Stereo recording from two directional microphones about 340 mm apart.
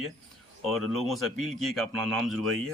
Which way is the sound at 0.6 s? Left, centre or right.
Centre.